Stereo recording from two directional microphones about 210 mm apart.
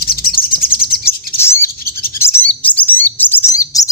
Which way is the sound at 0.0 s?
45° left (ahead or behind).